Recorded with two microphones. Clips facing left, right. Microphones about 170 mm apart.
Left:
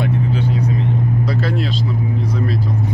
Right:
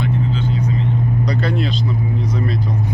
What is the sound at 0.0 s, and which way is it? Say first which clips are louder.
Vehicle: left 1 dB; 60° left (ahead or behind).